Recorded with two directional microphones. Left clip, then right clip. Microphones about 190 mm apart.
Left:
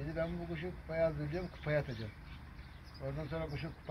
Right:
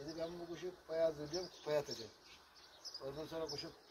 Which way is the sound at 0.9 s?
30° right (ahead or behind).